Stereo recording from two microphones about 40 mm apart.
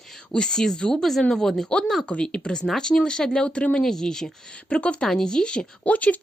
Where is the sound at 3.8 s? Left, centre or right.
Centre.